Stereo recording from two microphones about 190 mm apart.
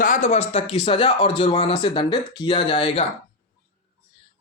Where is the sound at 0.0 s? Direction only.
40° left (ahead or behind).